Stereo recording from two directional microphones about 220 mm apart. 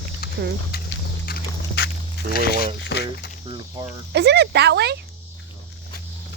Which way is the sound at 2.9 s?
50° left (ahead or behind).